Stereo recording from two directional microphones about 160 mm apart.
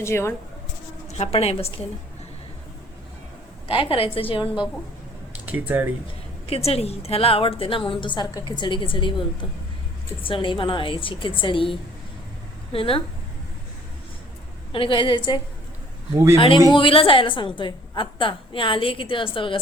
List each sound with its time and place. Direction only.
0.0 s speech: 15° left (ahead or behind)
1.2 s a woman's voice: 40° left (ahead or behind)
3.7 s a woman's voice: 35° left (ahead or behind)
5.3 s a sound: 10° right (ahead or behind)
6.5 s a woman's voice: 40° left (ahead or behind)
14.7 s a woman's voice: 35° left (ahead or behind)
16.4 s a woman's voice: 30° left (ahead or behind)